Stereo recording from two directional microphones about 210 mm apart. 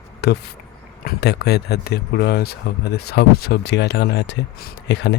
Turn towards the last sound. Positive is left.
turn(degrees=55)  # may be behind; listen again after turning